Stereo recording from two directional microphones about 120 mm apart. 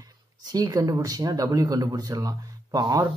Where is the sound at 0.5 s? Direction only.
30° right (ahead or behind).